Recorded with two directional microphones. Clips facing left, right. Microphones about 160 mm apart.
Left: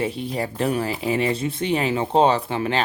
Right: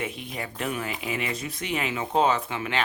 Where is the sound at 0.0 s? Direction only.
35° left (ahead or behind).